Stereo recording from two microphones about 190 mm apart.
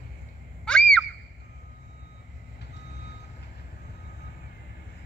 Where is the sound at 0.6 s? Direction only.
5° left (ahead or behind).